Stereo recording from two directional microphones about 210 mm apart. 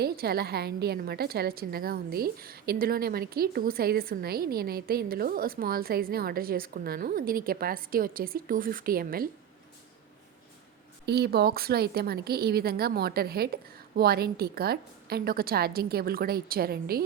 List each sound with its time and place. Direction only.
0.0 s a woman's voice: 50° right (ahead or behind)
11.0 s a woman's voice: 50° right (ahead or behind)